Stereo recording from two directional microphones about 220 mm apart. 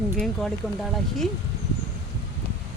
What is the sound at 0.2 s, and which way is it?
Speech, centre (ahead or behind).